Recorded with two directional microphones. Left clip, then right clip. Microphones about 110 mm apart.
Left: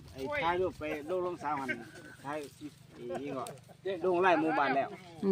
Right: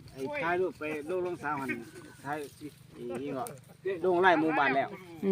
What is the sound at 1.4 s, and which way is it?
Speech, 65° right (ahead or behind).